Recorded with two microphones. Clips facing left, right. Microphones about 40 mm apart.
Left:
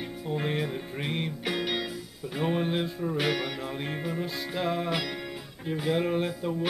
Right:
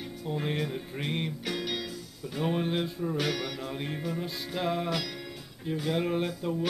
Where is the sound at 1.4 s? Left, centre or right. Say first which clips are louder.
Left 3 dB; centre.